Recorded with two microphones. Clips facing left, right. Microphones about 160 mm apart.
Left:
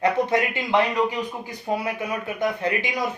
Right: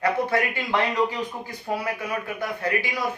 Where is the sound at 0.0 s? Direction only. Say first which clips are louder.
Left 2 dB; 20° left (ahead or behind).